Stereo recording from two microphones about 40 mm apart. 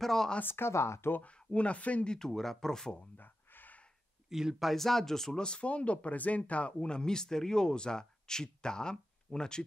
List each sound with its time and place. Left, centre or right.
0.0 s speech: centre
0.4 s speech: left
1.2 s speech: left
2.0 s speech: centre
3.2 s a sound: left
4.3 s speech: centre
4.7 s speech: centre
5.4 s speech: left